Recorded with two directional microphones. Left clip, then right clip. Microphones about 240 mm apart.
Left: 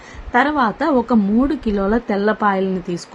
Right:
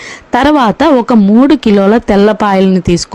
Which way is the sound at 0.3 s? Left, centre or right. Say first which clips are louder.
Right 8 dB; right.